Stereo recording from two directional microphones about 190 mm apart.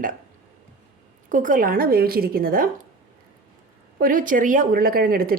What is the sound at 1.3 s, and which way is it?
Speech, 45° right (ahead or behind).